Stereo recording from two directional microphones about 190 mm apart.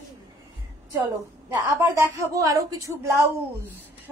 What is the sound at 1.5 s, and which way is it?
Speech, 15° right (ahead or behind).